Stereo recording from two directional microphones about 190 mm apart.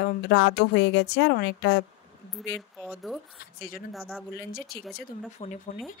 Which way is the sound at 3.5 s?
50° left (ahead or behind).